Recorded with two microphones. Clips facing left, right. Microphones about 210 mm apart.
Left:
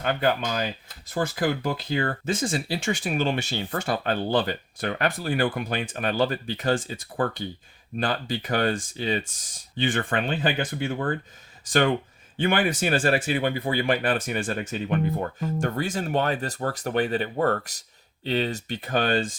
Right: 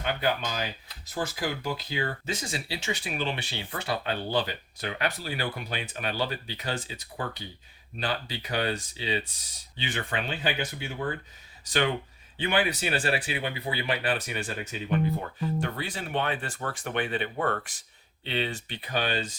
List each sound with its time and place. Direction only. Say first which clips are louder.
0.0 s speech: left 4 dB; 50° left (ahead or behind)